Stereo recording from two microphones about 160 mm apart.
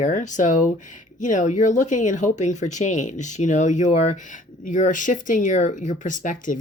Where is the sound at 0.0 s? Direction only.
50° left (ahead or behind).